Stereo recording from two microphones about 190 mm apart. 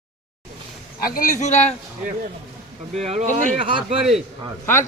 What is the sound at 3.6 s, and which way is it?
Speech, 30° right (ahead or behind).